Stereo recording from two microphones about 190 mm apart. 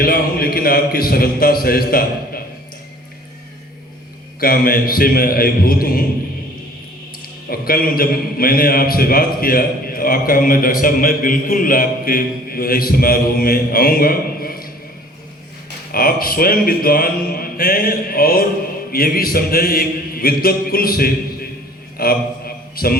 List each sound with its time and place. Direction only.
0.0 s a man's voice: 50° left (ahead or behind)
4.4 s a man's voice: 50° left (ahead or behind)
7.5 s a man's voice: 50° left (ahead or behind)
15.9 s a man's voice: 50° left (ahead or behind)
21.9 s a sound: 50° left (ahead or behind)